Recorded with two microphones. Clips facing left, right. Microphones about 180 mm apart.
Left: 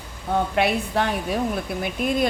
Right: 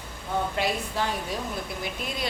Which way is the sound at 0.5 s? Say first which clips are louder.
Left 6 dB; 65° left (ahead or behind).